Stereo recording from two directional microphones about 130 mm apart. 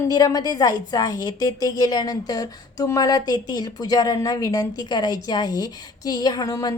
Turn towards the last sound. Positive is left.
turn(degrees=25)  # may be behind; listen again after turning